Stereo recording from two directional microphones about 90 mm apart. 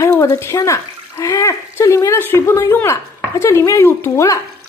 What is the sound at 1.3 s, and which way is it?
A child's voice, 35° left (ahead or behind).